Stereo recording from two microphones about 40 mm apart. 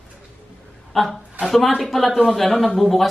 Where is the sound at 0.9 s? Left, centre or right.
Centre.